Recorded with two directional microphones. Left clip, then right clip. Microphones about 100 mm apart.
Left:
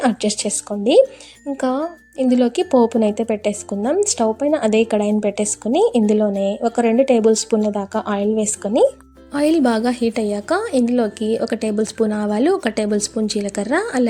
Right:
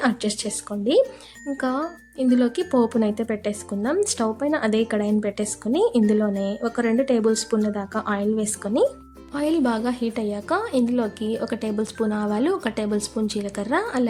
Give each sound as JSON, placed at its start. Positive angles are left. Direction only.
{"t": 0.0, "sound": "a woman's voice", "side_deg": 35}
{"t": 1.5, "sound": "a woman's voice", "side_deg": 35}
{"t": 9.3, "sound": "a woman's voice", "side_deg": 55}